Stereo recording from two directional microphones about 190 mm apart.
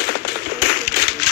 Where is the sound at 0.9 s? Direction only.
60° left (ahead or behind).